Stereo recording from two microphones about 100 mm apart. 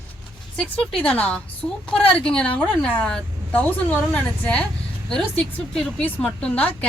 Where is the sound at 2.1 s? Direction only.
10° left (ahead or behind).